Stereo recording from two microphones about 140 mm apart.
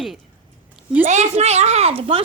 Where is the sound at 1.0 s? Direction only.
55° right (ahead or behind).